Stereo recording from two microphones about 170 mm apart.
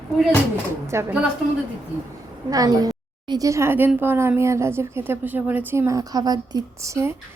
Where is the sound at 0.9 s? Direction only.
15° right (ahead or behind).